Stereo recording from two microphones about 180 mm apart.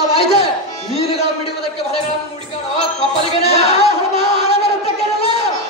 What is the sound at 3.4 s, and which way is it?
Speech, 35° left (ahead or behind).